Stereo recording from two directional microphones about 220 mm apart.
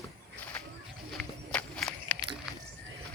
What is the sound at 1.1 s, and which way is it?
Walk, 5° left (ahead or behind).